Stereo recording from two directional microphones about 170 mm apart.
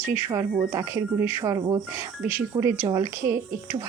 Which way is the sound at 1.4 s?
20° right (ahead or behind).